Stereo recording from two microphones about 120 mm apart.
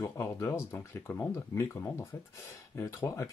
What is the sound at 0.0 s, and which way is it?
Speech, 20° left (ahead or behind).